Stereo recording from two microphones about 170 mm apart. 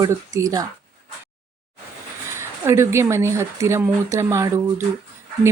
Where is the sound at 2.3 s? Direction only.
15° right (ahead or behind).